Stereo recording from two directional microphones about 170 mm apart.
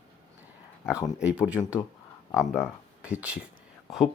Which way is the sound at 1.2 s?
5° right (ahead or behind).